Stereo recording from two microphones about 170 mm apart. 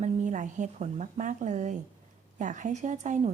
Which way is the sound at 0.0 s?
45° right (ahead or behind).